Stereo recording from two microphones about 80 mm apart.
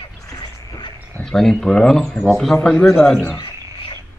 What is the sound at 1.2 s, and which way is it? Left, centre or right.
Speech, centre.